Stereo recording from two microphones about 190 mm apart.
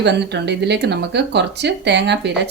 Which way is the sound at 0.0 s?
65° right (ahead or behind).